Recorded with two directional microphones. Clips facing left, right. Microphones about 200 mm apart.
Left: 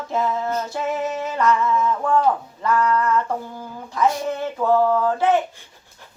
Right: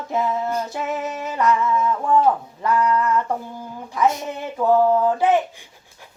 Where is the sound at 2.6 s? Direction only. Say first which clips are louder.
Even; 15° right (ahead or behind).